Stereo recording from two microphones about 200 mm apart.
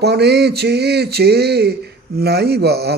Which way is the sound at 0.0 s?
55° right (ahead or behind).